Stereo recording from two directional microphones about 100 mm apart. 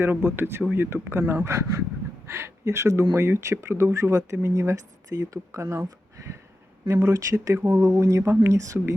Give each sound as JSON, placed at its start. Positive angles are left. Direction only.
{"t": 0.0, "sound": "speech", "side_deg": -25}